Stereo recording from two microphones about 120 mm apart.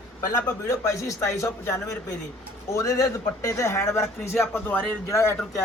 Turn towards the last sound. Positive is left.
turn(degrees=20)  # may be behind; listen again after turning